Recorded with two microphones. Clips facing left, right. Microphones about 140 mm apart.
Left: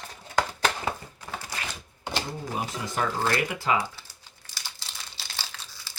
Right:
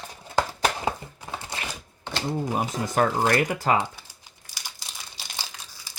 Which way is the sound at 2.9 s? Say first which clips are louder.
Right 5 dB; 50° right (ahead or behind).